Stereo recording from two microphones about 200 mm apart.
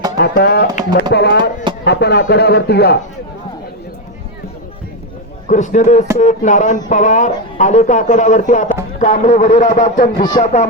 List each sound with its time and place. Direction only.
0.2 s speech: 50° left (ahead or behind)
5.5 s speech: 35° left (ahead or behind)